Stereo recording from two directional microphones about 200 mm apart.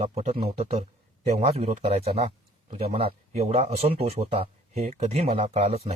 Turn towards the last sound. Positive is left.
turn(degrees=-30)  # may be behind; listen again after turning